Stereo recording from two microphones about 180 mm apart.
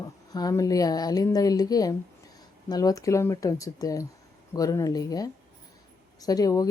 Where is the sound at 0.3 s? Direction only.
20° left (ahead or behind).